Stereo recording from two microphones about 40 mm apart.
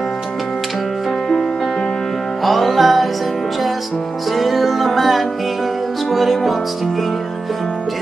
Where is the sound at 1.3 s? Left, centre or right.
Centre.